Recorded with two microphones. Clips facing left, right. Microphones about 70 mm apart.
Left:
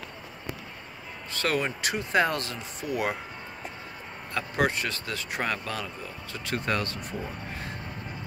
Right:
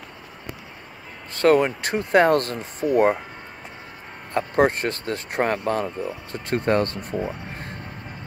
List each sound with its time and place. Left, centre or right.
1.3 s speech: right
4.3 s speech: right